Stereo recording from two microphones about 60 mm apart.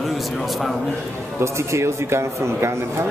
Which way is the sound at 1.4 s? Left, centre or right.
Right.